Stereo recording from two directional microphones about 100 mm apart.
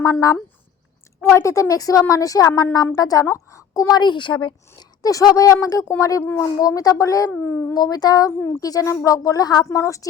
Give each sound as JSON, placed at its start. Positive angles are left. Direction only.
{"t": 0.0, "sound": "a woman's voice", "side_deg": 35}
{"t": 4.8, "sound": "a woman's voice", "side_deg": 40}
{"t": 7.8, "sound": "a woman's voice", "side_deg": 40}
{"t": 8.3, "sound": "speech", "side_deg": 25}
{"t": 8.6, "sound": "a woman's voice", "side_deg": 35}